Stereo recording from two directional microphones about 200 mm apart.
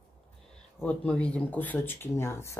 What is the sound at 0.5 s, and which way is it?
Speech, 5° left (ahead or behind).